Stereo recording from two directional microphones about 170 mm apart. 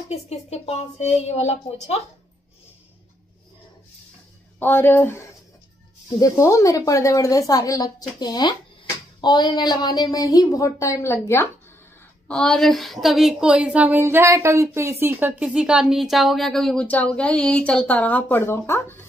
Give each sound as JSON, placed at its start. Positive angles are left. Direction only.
{"t": 0.1, "sound": "speech", "side_deg": 40}
{"t": 4.6, "sound": "speech", "side_deg": 10}
{"t": 12.3, "sound": "a woman's voice", "side_deg": 5}